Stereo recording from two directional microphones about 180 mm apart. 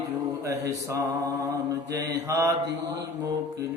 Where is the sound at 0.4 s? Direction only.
15° right (ahead or behind).